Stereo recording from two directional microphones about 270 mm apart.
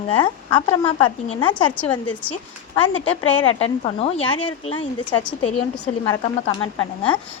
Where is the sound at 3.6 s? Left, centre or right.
Left.